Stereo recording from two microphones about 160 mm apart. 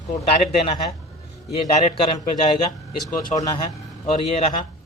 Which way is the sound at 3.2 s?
20° left (ahead or behind).